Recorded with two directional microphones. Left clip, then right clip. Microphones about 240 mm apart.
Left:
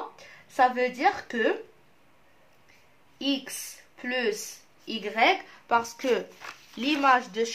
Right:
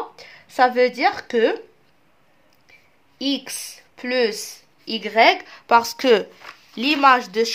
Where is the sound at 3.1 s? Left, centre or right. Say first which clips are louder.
Right 5 dB; right.